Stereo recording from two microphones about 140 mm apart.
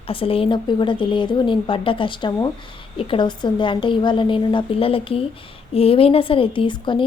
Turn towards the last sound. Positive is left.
turn(degrees=35)  # may be behind; listen again after turning